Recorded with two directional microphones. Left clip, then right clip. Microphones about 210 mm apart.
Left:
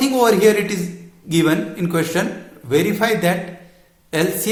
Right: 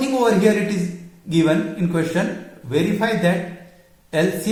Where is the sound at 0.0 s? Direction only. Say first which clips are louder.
Left 3 dB; 40° left (ahead or behind).